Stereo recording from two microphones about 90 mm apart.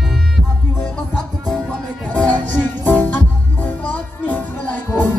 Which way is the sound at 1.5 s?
5° left (ahead or behind).